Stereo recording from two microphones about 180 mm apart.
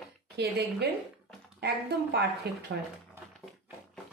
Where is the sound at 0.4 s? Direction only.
70° right (ahead or behind).